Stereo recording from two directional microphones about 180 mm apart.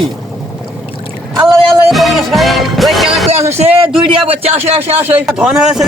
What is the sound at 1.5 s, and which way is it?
Music, centre (ahead or behind).